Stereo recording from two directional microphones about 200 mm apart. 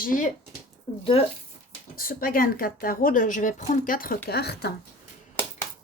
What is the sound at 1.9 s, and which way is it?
A woman's voice, 45° left (ahead or behind).